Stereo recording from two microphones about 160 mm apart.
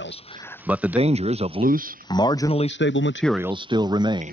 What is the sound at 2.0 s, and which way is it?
Speech, 25° left (ahead or behind).